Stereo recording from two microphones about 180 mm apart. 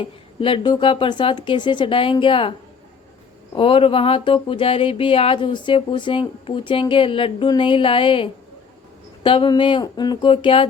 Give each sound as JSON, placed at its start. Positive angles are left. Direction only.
{"t": 0.0, "sound": "speech", "side_deg": 30}